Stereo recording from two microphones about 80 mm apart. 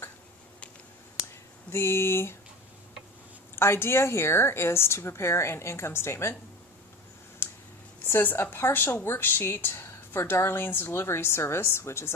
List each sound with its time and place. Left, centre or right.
1.7 s a woman's voice: left
3.5 s a woman's voice: left
7.4 s clicking: left
8.0 s speech: left